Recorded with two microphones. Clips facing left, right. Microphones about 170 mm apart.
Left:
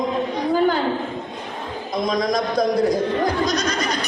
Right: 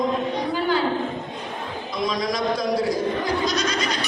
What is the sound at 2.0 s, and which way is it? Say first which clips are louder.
A man's voice: left 2 dB; 50° left (ahead or behind).